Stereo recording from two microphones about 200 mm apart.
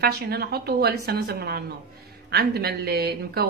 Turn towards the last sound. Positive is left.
turn(degrees=-50)  # may be behind; listen again after turning